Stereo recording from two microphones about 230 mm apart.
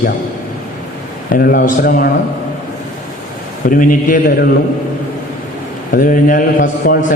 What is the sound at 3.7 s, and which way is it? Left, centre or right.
Speech, left.